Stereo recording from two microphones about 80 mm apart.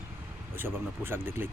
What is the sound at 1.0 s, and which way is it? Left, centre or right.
Speech, right.